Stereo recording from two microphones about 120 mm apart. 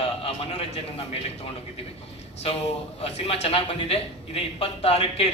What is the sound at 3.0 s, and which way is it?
A man's voice, 60° left (ahead or behind).